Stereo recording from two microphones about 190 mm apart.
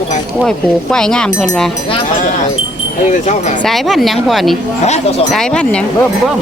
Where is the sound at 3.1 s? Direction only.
40° left (ahead or behind).